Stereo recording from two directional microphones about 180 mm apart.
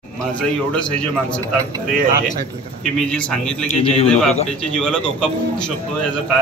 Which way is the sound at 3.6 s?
35° left (ahead or behind).